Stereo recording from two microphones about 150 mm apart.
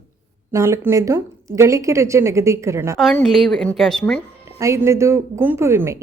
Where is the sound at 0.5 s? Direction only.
20° right (ahead or behind).